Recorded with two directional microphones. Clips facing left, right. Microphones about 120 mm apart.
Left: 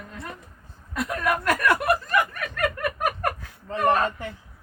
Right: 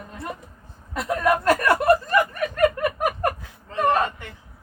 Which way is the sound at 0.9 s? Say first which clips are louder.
Right 4 dB; 25° right (ahead or behind).